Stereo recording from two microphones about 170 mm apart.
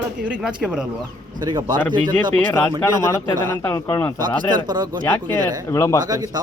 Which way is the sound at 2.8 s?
15° left (ahead or behind).